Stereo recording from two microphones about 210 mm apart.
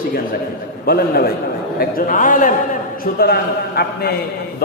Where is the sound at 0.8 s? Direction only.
45° left (ahead or behind).